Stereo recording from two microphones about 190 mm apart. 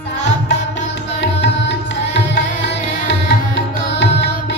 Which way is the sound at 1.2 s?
70° left (ahead or behind).